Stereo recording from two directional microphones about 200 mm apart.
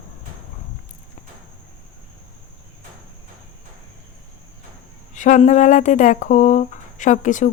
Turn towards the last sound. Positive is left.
turn(degrees=40)  # may be behind; listen again after turning